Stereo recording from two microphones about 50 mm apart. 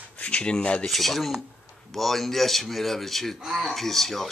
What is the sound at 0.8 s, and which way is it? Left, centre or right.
A man's voice, centre.